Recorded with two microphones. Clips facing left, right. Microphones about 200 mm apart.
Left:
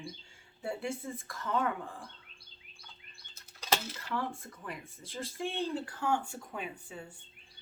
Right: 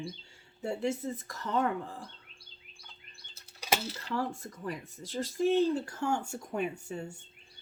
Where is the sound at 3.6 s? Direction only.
10° right (ahead or behind).